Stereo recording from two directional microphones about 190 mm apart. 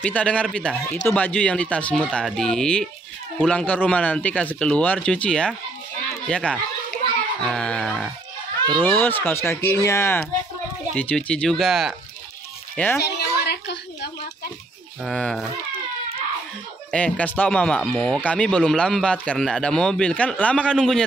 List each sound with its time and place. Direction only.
0.0 s speech: 5° left (ahead or behind)
12.7 s a child's voice: 10° left (ahead or behind)
13.0 s a sound: 60° left (ahead or behind)
15.0 s speech: 5° left (ahead or behind)
16.9 s speech: 5° left (ahead or behind)